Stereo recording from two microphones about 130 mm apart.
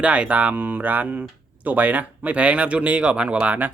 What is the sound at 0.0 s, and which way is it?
Speech, 10° right (ahead or behind).